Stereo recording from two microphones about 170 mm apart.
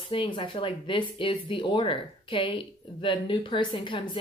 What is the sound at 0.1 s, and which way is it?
Speech, 30° left (ahead or behind).